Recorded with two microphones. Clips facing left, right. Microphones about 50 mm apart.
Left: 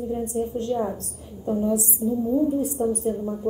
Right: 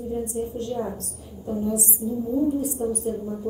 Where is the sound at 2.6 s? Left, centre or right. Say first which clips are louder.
Left 2 dB; left.